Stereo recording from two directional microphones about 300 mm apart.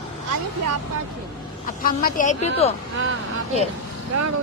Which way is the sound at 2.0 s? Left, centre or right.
Left.